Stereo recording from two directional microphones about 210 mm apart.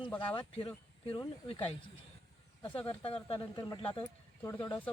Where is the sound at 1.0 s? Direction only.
25° left (ahead or behind).